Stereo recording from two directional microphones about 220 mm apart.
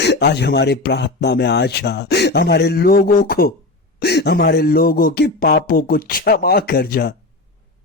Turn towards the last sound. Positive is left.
turn(degrees=45)  # may be behind; listen again after turning